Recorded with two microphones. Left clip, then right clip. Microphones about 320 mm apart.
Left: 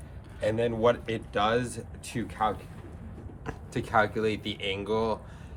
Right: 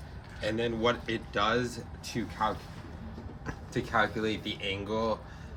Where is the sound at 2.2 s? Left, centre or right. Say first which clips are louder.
Left 1 dB; left.